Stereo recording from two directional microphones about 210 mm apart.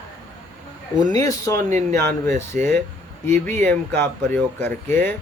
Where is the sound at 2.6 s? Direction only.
40° right (ahead or behind).